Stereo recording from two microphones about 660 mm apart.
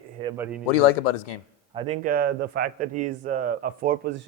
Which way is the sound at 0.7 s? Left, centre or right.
Left.